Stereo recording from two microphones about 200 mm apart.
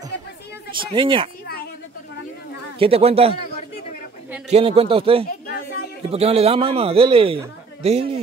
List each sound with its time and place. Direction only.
0.9 s a man's voice: 25° right (ahead or behind)
2.8 s a man's voice: 30° right (ahead or behind)
4.5 s a man's voice: 30° right (ahead or behind)